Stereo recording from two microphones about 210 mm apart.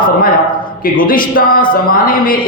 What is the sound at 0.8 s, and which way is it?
A man's voice, 40° left (ahead or behind).